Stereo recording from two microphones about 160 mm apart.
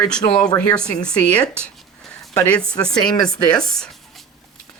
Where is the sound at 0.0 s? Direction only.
5° left (ahead or behind).